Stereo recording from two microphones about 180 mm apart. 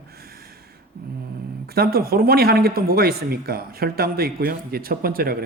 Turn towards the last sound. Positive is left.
turn(degrees=-55)  # may be behind; listen again after turning